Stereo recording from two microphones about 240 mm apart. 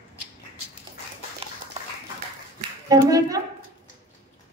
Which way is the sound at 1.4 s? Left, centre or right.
Right.